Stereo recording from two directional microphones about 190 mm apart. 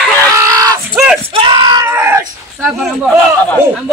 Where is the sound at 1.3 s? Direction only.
25° right (ahead or behind).